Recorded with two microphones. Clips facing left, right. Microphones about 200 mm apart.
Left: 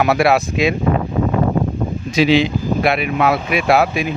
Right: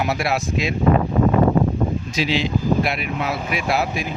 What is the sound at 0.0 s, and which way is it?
Speech, 65° left (ahead or behind).